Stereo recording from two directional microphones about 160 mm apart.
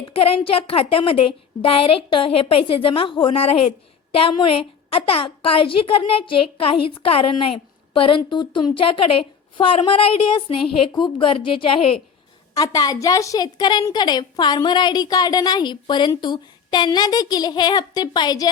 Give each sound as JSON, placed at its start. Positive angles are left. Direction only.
{"t": 0.1, "sound": "a woman's voice", "side_deg": 35}
{"t": 12.5, "sound": "a woman's voice", "side_deg": 25}